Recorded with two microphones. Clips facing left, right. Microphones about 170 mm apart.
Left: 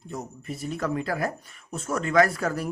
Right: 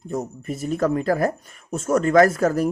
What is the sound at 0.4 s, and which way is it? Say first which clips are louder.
Speech: right 7 dB; 45° right (ahead or behind).